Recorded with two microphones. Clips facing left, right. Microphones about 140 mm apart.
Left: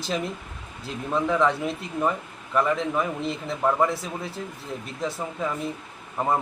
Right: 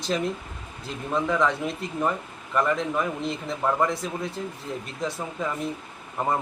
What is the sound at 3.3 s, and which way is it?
A man's voice, 5° left (ahead or behind).